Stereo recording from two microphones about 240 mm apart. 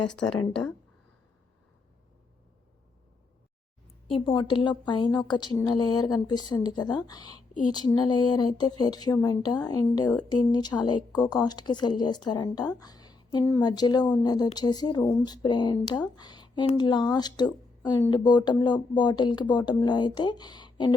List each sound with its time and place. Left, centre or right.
4.1 s a woman's voice: left